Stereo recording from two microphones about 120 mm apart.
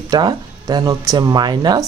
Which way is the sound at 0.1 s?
35° right (ahead or behind).